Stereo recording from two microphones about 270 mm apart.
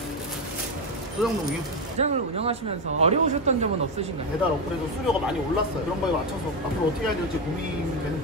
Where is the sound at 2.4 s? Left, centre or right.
Right.